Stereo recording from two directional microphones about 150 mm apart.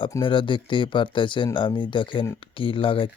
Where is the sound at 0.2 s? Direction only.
35° left (ahead or behind).